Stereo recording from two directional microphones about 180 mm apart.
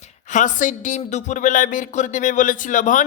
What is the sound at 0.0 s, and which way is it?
Speech, 45° left (ahead or behind).